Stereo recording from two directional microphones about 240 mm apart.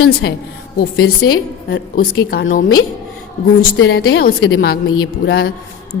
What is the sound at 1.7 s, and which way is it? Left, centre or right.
Speech, left.